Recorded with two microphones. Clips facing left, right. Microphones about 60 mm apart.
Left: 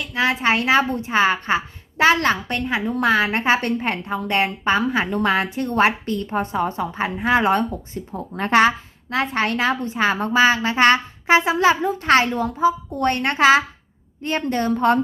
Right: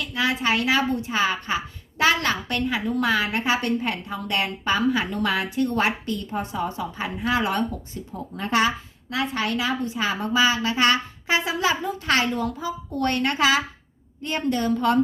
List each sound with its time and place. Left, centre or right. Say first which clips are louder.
0.0 s a woman's voice: left 4 dB; left
8.4 s a woman's voice: left 6 dB; left
9.0 s a woman's voice: left 4 dB; left